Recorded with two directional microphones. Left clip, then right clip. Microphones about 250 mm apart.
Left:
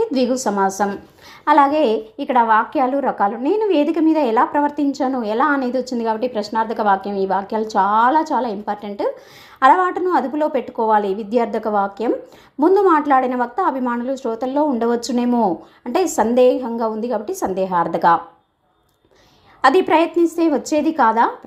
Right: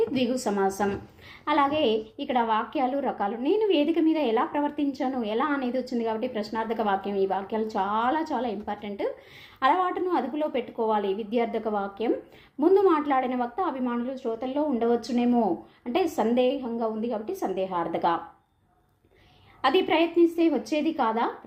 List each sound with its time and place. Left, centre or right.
0.1 s a woman's voice: left
19.6 s a woman's voice: left